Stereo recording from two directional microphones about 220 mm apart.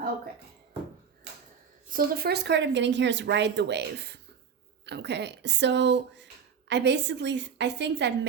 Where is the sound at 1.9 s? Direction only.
40° right (ahead or behind).